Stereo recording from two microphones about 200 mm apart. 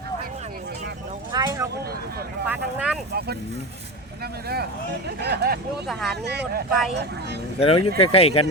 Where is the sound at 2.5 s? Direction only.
5° right (ahead or behind).